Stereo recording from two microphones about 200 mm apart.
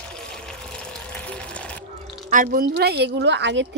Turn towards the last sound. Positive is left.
turn(degrees=-60)  # may be behind; listen again after turning